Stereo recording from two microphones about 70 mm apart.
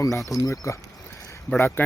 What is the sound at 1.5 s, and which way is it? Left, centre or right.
Speech, left.